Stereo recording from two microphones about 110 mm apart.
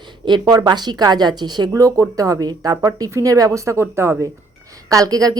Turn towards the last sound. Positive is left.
turn(degrees=-35)  # may be behind; listen again after turning